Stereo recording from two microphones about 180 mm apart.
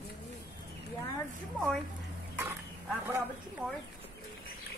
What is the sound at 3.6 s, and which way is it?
Speech, 10° right (ahead or behind).